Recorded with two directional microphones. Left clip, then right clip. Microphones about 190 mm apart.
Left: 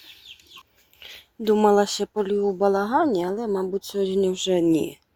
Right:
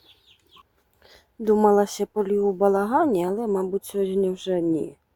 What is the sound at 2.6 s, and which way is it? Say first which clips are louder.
Speech: even; 15° right (ahead or behind).